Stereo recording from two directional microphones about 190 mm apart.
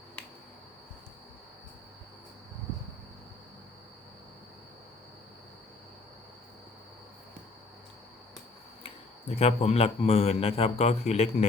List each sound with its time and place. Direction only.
9.3 s a man's voice: 35° left (ahead or behind)